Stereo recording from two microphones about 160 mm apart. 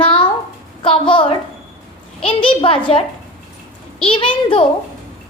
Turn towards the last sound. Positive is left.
turn(degrees=35)  # may be behind; listen again after turning